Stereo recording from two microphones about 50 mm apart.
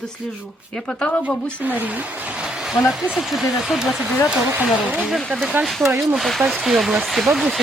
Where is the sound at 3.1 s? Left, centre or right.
Centre.